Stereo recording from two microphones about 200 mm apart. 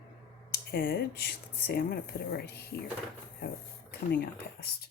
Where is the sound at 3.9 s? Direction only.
55° left (ahead or behind).